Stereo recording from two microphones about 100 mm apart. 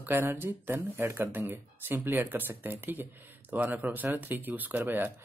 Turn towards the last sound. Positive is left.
turn(degrees=-20)  # may be behind; listen again after turning